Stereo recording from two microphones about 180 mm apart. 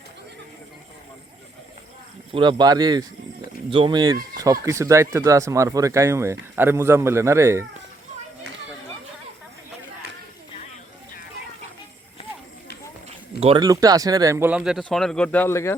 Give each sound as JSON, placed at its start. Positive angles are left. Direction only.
{"t": 2.3, "sound": "speech", "side_deg": -25}
{"t": 13.4, "sound": "speech", "side_deg": -30}
{"t": 13.7, "sound": "speech", "side_deg": -20}